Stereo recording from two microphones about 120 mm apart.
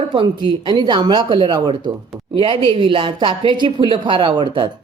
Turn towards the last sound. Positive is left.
turn(degrees=-40)  # may be behind; listen again after turning